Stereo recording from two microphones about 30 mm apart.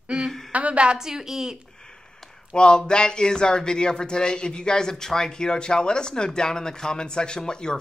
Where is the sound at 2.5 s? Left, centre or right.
Left.